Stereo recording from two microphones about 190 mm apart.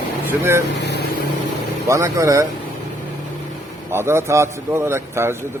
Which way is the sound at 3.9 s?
15° right (ahead or behind).